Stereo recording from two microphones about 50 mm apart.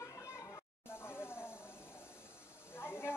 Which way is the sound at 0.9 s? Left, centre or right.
Left.